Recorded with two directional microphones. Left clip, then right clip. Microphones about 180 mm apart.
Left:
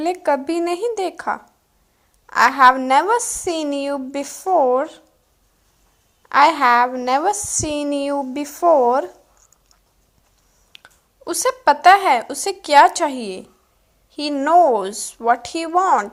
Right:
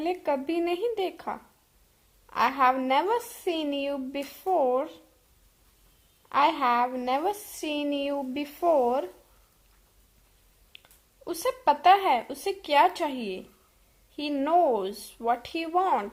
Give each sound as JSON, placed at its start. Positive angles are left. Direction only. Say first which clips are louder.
{"t": 0.2, "sound": "a woman's voice", "louder": "left 9 dB", "side_deg": 15}
{"t": 6.2, "sound": "a woman's voice", "louder": "left 10 dB", "side_deg": 15}
{"t": 10.7, "sound": "a woman's voice", "louder": "left 7 dB", "side_deg": 20}